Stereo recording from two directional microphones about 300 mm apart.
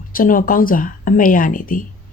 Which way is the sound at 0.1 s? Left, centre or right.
Left.